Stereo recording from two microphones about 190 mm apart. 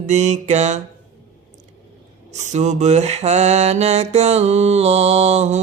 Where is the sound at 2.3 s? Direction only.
40° right (ahead or behind).